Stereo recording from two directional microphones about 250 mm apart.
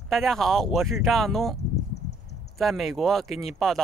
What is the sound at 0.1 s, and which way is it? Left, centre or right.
Speech, centre.